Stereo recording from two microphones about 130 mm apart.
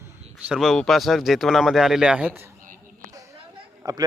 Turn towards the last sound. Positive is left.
turn(degrees=-30)  # may be behind; listen again after turning